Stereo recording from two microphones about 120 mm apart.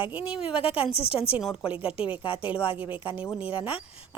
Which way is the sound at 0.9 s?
55° left (ahead or behind).